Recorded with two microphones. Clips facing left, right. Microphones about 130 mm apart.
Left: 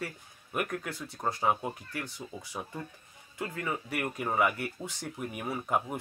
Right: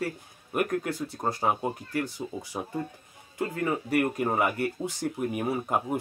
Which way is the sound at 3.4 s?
40° right (ahead or behind).